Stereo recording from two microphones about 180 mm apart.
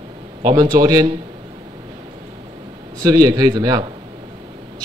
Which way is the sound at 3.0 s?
20° right (ahead or behind).